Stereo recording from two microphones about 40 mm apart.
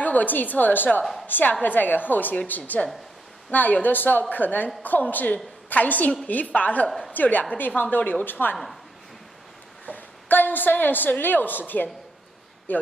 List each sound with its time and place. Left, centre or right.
0.0 s a woman's voice: left
3.8 s a woman's voice: left
9.8 s a woman's voice: left